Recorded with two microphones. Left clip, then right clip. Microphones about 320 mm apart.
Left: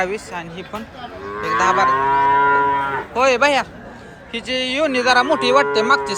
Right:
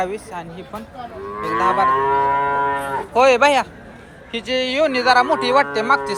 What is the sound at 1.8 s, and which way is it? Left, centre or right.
Cattle, right.